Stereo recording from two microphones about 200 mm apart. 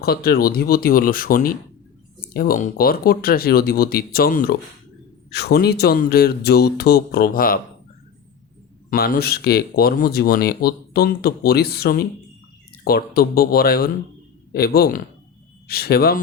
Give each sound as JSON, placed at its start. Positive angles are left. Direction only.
{"t": 0.0, "sound": "speech", "side_deg": 50}
{"t": 8.9, "sound": "speech", "side_deg": 50}